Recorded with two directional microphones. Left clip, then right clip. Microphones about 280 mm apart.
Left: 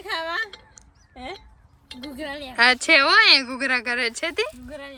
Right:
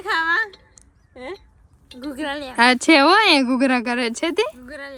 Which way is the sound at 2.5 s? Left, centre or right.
Centre.